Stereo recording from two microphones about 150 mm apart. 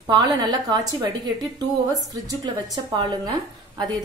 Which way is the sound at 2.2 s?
30° right (ahead or behind).